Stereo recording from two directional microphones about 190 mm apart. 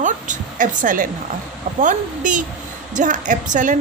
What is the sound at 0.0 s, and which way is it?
A woman's voice, 40° right (ahead or behind).